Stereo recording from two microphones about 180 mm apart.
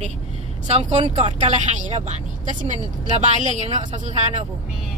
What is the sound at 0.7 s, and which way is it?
Speech, 40° right (ahead or behind).